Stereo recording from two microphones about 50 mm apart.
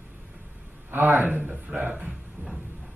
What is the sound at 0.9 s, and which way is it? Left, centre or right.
Speech, right.